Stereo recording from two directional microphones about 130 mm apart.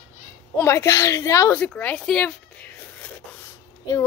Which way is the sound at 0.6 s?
20° left (ahead or behind).